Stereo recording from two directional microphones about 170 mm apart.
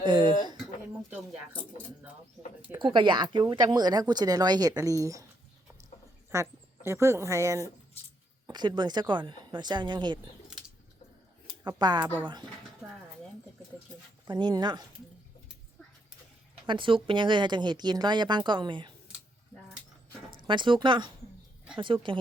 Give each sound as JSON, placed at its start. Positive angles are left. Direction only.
{"t": 0.0, "sound": "a sound", "side_deg": -25}
{"t": 3.0, "sound": "speech", "side_deg": -30}
{"t": 6.3, "sound": "speech", "side_deg": -15}
{"t": 11.8, "sound": "speech", "side_deg": -25}
{"t": 14.3, "sound": "speech", "side_deg": -25}
{"t": 16.6, "sound": "speech", "side_deg": -30}
{"t": 20.5, "sound": "speech", "side_deg": -30}